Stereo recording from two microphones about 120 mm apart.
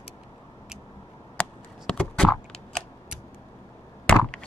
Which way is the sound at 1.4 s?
10° left (ahead or behind).